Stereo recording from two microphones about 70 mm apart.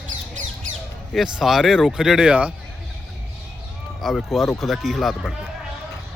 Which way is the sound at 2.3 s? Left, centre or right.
Centre.